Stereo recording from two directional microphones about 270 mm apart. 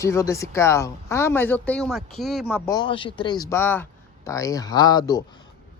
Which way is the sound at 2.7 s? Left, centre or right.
Centre.